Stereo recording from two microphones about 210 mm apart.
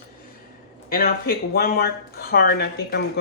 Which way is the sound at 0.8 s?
45° left (ahead or behind).